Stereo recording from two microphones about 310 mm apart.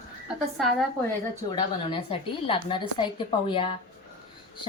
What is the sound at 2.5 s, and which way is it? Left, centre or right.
Speech, centre.